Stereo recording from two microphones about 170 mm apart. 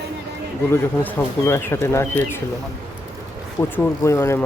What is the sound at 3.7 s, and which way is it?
Speech, 15° left (ahead or behind).